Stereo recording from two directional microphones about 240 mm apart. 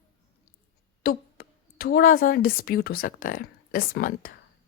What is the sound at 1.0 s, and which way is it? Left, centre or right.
A woman's voice, left.